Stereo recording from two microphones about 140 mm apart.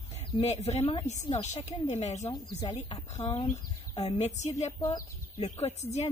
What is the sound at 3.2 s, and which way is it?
Speech, 40° left (ahead or behind).